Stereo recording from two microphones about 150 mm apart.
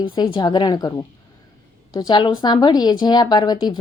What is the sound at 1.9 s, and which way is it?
A woman's voice, 30° left (ahead or behind).